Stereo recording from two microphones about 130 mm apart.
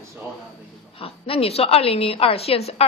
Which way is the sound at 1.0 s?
45° left (ahead or behind).